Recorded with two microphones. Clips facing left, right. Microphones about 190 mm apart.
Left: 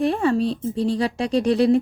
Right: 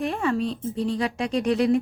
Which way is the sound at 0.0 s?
35° left (ahead or behind).